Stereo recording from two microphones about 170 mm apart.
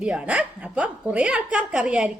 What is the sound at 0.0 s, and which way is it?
A woman's voice, 5° right (ahead or behind).